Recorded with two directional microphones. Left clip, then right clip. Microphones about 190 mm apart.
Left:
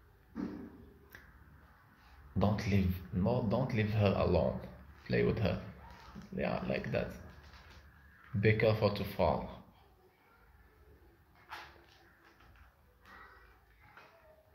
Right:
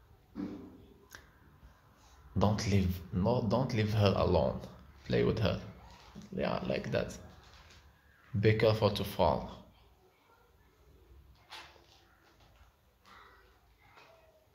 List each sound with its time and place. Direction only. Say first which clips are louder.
1.1 s a sound: right 2 dB; 15° right (ahead or behind)
2.3 s speech: right 2 dB; 15° right (ahead or behind)
8.4 s speech: right 2 dB; 15° right (ahead or behind)